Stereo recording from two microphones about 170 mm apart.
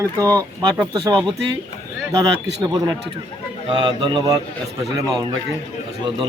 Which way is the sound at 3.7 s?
25° right (ahead or behind).